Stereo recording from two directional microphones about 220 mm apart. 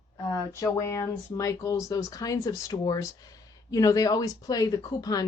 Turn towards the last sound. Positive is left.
turn(degrees=15)  # may be behind; listen again after turning